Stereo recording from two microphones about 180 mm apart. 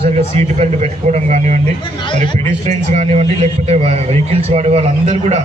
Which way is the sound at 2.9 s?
40° right (ahead or behind).